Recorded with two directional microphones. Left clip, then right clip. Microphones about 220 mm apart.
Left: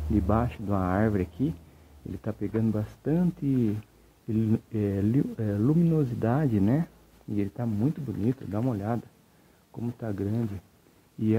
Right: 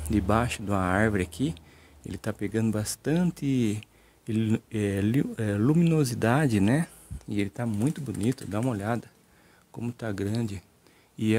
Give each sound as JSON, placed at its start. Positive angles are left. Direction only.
{"t": 0.1, "sound": "speech", "side_deg": -15}